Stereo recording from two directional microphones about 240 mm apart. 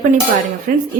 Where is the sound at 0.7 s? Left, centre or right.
Right.